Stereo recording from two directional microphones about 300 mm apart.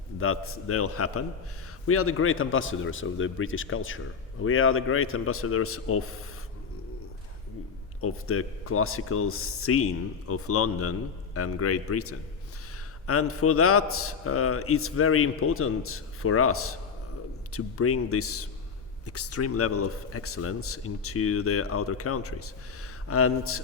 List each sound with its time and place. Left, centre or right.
0.2 s speech: left
8.0 s speech: left